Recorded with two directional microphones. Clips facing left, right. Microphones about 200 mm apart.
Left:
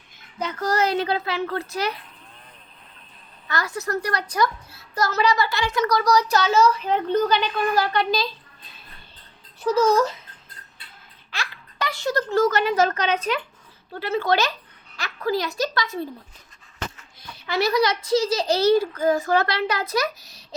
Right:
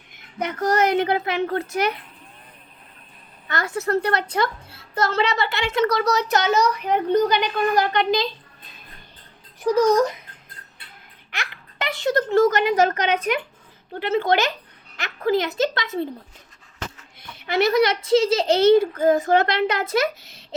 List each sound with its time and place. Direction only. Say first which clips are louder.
0.6 s a child's voice: right 3 dB; 20° right (ahead or behind)
3.5 s a child's voice: right 4 dB; 25° right (ahead or behind)
9.6 s a child's voice: right 2 dB; 15° right (ahead or behind)
11.3 s a sound: even; 20° right (ahead or behind)
13.0 s a child's voice: right 2 dB; 15° right (ahead or behind)
17.2 s a child's voice: right 3 dB; 20° right (ahead or behind)